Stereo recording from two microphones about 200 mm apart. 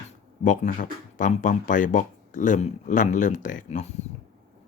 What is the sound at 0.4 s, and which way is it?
Speech, 40° left (ahead or behind).